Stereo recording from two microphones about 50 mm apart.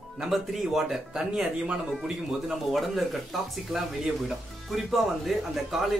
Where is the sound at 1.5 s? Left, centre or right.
Centre.